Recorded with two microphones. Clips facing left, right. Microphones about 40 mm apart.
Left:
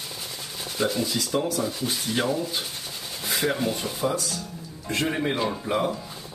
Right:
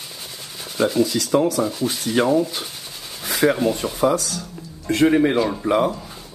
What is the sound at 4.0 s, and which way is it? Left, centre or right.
Speech, right.